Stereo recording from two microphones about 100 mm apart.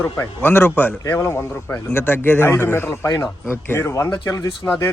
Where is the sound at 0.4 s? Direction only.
20° left (ahead or behind).